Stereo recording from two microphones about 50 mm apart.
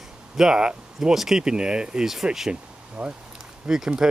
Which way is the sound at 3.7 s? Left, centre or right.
Centre.